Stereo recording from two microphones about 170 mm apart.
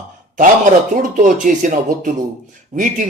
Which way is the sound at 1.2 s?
50° right (ahead or behind).